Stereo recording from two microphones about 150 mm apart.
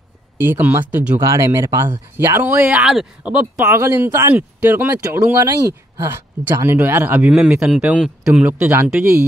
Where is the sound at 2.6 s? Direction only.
5° right (ahead or behind).